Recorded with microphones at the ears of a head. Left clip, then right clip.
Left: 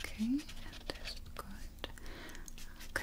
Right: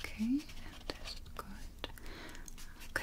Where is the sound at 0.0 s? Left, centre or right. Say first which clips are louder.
Right 1 dB; centre.